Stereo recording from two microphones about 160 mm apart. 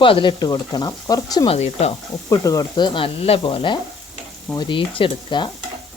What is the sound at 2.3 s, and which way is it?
Speech, 20° left (ahead or behind).